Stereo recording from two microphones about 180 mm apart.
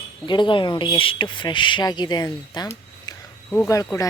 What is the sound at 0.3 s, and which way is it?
Speech, 25° left (ahead or behind).